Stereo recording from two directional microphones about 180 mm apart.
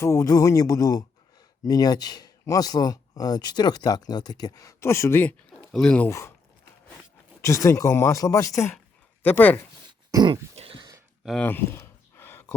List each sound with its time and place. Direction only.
0.0 s speech: 15° left (ahead or behind)
6.1 s speech: 15° left (ahead or behind)
7.4 s speech: 15° left (ahead or behind)
10.1 s dog: 20° right (ahead or behind)
10.6 s a sound: 30° right (ahead or behind)
11.3 s a sound: 10° left (ahead or behind)